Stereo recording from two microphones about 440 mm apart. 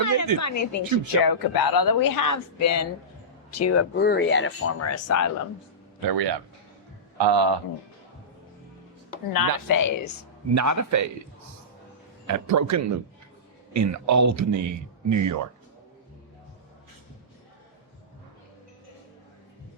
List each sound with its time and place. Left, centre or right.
0.0 s a sound: left
0.3 s speech: left
1.2 s speech: left
6.0 s a man's voice: right
9.3 s speech: left
10.5 s a man's voice: right
12.3 s a man's voice: right